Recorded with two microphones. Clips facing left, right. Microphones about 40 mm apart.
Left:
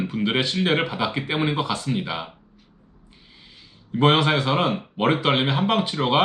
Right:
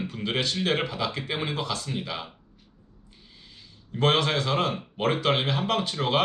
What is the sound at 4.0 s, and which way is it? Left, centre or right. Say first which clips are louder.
Speech: left 5 dB; centre.